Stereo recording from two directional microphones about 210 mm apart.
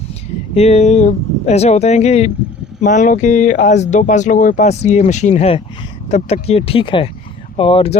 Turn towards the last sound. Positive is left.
turn(degrees=25)  # may be behind; listen again after turning